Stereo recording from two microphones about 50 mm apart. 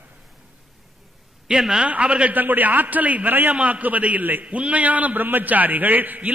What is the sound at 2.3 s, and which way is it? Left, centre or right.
A man's voice, right.